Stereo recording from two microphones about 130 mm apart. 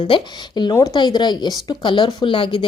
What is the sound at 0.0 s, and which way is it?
Speech, 35° left (ahead or behind).